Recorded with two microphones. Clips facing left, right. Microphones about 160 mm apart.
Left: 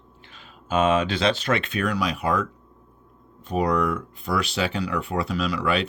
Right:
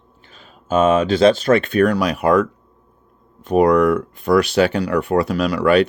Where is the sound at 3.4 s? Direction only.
85° right.